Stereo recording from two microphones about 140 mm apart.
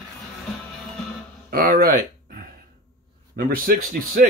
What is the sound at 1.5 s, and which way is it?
Speech, 90° right.